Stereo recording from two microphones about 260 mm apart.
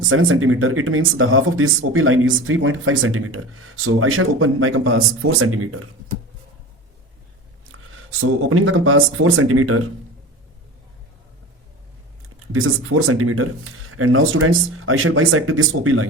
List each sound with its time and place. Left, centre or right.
0.0 s speech: right
8.4 s speech: right
12.5 s speech: right